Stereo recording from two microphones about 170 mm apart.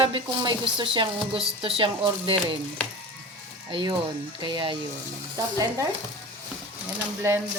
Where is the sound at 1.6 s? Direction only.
30° right (ahead or behind).